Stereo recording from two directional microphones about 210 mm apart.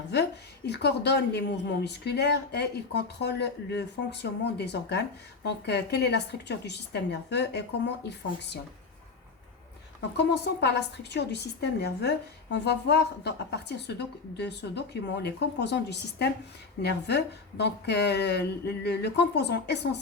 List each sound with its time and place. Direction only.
0.1 s a woman's voice: 55° left (ahead or behind)
10.2 s a woman's voice: 55° left (ahead or behind)